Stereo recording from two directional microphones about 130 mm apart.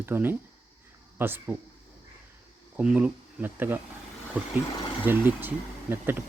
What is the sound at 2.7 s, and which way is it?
Speech, 10° right (ahead or behind).